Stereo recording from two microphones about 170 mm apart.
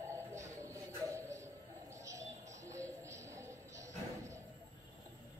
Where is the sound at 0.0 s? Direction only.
15° right (ahead or behind).